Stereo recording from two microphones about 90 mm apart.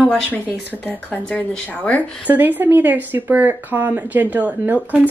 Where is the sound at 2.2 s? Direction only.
20° right (ahead or behind).